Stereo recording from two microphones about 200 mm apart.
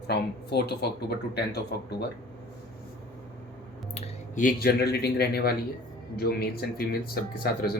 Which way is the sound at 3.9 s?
35° left (ahead or behind).